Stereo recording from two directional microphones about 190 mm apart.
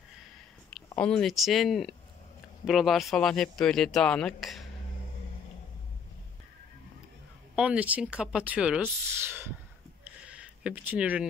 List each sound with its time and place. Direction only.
0.9 s speech: 5° left (ahead or behind)
7.5 s speech: 5° right (ahead or behind)
10.0 s a sound: 5° right (ahead or behind)